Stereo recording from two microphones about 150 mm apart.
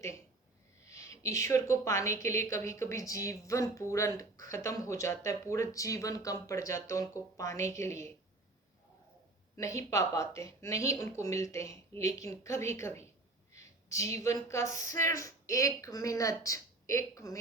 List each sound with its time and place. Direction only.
0.9 s a woman's voice: 20° left (ahead or behind)
9.6 s a woman's voice: 20° left (ahead or behind)